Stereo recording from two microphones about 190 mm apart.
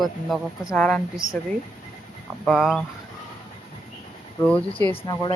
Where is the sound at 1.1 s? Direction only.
20° left (ahead or behind).